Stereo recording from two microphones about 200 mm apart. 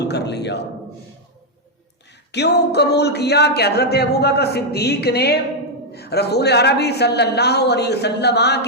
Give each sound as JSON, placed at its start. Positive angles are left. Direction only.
{"t": 0.0, "sound": "speech", "side_deg": 55}
{"t": 2.3, "sound": "speech", "side_deg": 55}